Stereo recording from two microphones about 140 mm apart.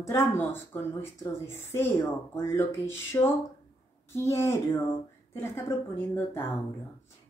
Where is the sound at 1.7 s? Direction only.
20° left (ahead or behind).